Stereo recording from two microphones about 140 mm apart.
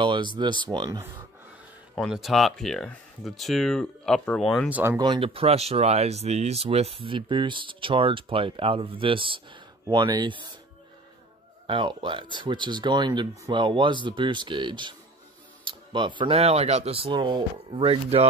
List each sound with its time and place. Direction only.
0.0 s a sound: 35° right (ahead or behind)
0.4 s speech: 35° right (ahead or behind)
2.0 s speech: centre (ahead or behind)
4.6 s speech: 10° right (ahead or behind)
4.9 s speech: 35° right (ahead or behind)
11.6 s speech: 35° right (ahead or behind)
16.3 s speech: 50° right (ahead or behind)